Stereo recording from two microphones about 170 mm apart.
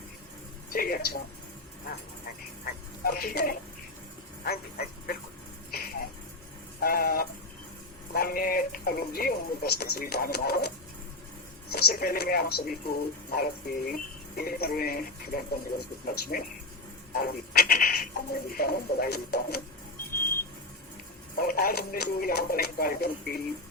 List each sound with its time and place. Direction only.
0.7 s speech: 60° left (ahead or behind)
2.6 s speech: 60° left (ahead or behind)
5.7 s a sound: 60° left (ahead or behind)
6.8 s speech: 60° left (ahead or behind)
11.7 s speech: 65° left (ahead or behind)
21.3 s speech: 60° left (ahead or behind)